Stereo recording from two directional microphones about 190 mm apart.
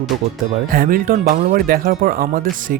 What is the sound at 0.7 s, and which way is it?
Speech, 45° right (ahead or behind).